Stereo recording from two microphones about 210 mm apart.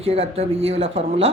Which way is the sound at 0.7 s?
30° right (ahead or behind).